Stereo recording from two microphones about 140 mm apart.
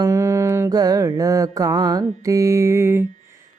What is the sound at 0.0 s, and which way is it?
Mantra, 20° right (ahead or behind).